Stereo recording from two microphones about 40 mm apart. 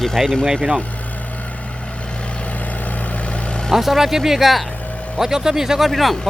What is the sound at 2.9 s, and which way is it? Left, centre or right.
Vehicle, left.